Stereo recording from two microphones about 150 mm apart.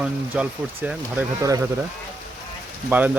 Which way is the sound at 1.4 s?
20° right (ahead or behind).